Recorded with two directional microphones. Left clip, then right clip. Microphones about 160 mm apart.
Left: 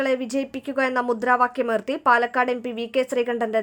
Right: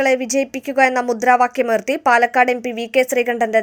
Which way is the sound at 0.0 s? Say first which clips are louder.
Right 7 dB; 15° right (ahead or behind).